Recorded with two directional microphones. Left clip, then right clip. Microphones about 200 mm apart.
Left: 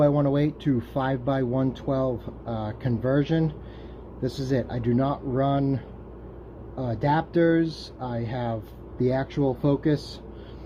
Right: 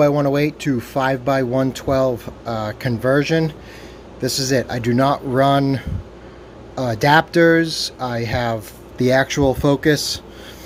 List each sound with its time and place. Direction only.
0.0 s speech: 15° right (ahead or behind)